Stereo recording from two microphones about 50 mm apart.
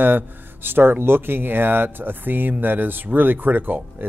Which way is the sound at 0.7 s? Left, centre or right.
Right.